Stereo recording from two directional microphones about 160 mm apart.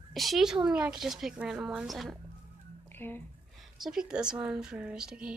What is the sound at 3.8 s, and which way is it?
A woman's voice, 5° right (ahead or behind).